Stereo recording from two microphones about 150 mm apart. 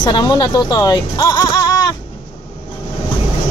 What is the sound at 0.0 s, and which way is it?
Speech, 30° left (ahead or behind).